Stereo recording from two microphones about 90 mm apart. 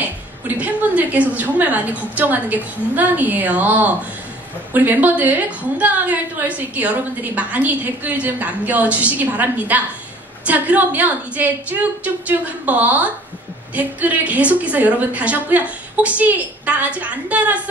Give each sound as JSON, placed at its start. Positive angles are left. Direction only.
{"t": 0.0, "sound": "a woman's voice", "side_deg": -15}